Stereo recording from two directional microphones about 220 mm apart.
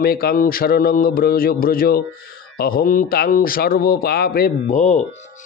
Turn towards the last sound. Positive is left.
turn(degrees=35)  # may be behind; listen again after turning